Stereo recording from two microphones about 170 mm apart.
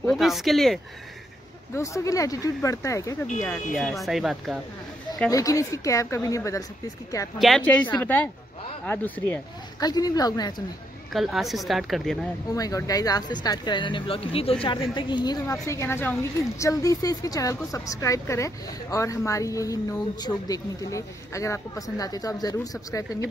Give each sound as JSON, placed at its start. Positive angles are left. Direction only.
{"t": 0.0, "sound": "a woman's voice", "side_deg": 0}
{"t": 1.8, "sound": "speech", "side_deg": 20}
{"t": 3.7, "sound": "a woman's voice", "side_deg": 0}
{"t": 5.3, "sound": "speech", "side_deg": 20}
{"t": 7.3, "sound": "a woman's voice", "side_deg": 0}
{"t": 8.8, "sound": "speech", "side_deg": 10}
{"t": 9.8, "sound": "speech", "side_deg": 20}
{"t": 11.1, "sound": "a woman's voice", "side_deg": 0}
{"t": 12.4, "sound": "speech", "side_deg": 20}